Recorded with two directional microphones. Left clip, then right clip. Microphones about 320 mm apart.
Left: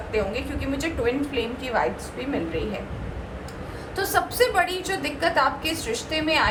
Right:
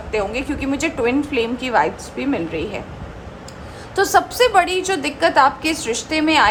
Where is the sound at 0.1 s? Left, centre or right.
Right.